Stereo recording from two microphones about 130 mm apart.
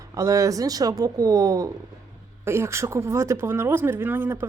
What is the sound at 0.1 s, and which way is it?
Speech, 25° right (ahead or behind).